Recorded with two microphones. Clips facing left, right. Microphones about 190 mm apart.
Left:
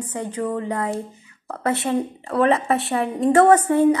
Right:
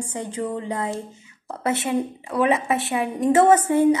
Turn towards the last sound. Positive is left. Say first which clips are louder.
# left 2 dB
turn(degrees=-20)  # may be behind; listen again after turning